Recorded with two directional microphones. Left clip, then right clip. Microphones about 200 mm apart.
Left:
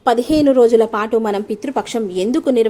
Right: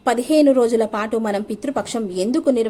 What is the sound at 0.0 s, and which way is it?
A woman's voice, 25° left (ahead or behind).